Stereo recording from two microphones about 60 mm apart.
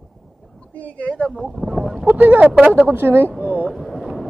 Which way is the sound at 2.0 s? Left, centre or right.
Right.